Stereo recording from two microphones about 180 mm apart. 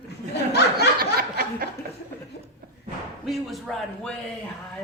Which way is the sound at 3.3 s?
Centre (ahead or behind).